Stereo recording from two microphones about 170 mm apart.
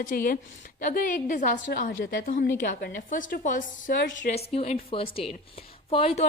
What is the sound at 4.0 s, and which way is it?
Speech, 90° left.